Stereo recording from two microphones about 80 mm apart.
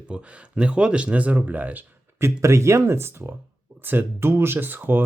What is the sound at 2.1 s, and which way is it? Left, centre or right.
Speech, right.